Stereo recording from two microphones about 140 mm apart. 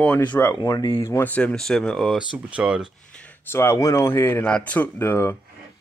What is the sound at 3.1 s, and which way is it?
A man's voice, 10° left (ahead or behind).